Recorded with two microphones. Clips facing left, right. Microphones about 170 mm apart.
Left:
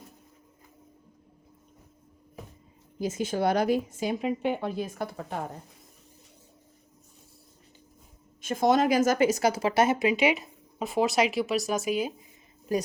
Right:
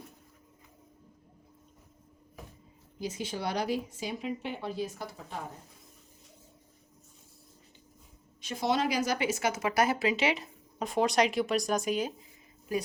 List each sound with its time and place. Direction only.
3.0 s a woman's voice: 50° left (ahead or behind)
8.4 s speech: 50° left (ahead or behind); by 12.1 s 10° left (ahead or behind)